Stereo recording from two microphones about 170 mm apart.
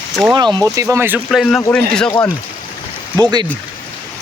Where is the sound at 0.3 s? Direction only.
25° right (ahead or behind); by 1.6 s centre (ahead or behind).